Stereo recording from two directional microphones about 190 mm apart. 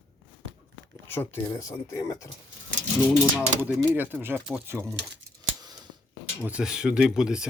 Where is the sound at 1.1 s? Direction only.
15° left (ahead or behind).